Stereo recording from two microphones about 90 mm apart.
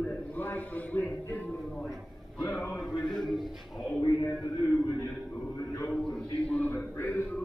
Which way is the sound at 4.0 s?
35° left (ahead or behind).